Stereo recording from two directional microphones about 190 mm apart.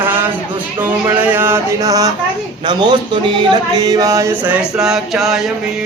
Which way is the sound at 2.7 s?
25° right (ahead or behind).